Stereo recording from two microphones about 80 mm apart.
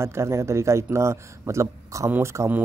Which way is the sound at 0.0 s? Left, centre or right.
Right.